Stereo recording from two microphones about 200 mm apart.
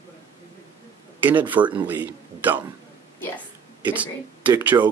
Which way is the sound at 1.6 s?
25° right (ahead or behind).